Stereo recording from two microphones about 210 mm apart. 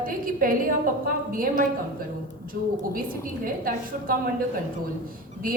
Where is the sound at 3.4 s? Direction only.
40° right (ahead or behind).